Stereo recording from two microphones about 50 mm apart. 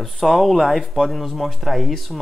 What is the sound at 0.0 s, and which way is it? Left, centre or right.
Speech, centre.